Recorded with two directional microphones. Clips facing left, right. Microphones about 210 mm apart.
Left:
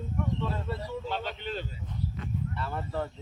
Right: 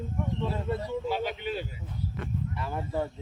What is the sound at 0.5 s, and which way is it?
Speech, 20° right (ahead or behind).